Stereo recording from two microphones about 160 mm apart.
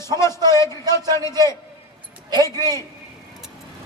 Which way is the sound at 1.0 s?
25° right (ahead or behind).